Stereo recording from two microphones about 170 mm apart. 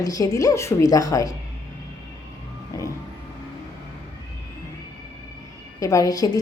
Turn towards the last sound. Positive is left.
turn(degrees=20)  # may be behind; listen again after turning